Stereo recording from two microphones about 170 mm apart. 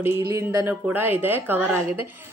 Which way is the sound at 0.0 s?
15° right (ahead or behind).